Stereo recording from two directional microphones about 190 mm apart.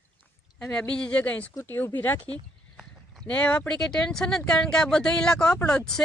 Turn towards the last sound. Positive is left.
turn(degrees=5)  # may be behind; listen again after turning